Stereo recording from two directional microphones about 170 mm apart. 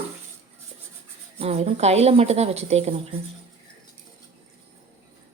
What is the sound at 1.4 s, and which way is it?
Speech, 35° right (ahead or behind).